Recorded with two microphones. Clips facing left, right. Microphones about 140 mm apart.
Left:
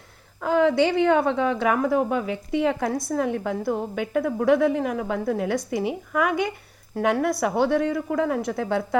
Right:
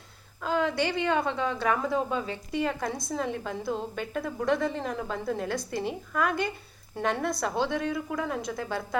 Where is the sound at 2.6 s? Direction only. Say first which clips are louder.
Left 6 dB; 80° left.